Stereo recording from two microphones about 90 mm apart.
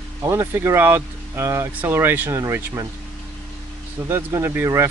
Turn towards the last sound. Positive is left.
turn(degrees=-30)  # may be behind; listen again after turning